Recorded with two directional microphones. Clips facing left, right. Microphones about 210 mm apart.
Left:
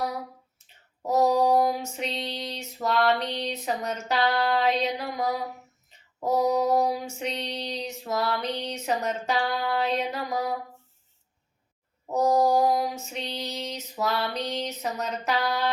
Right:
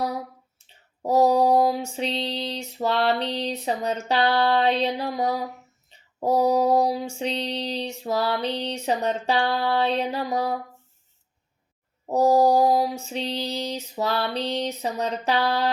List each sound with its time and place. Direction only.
1.0 s a sound: 30° right (ahead or behind)
6.1 s female singing: 30° right (ahead or behind)
12.0 s female singing: 35° right (ahead or behind)